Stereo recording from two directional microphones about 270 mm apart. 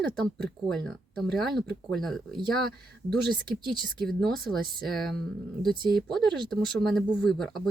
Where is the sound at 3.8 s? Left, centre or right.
Centre.